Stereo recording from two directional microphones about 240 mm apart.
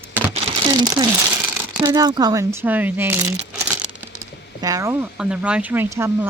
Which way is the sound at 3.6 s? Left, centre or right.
Centre.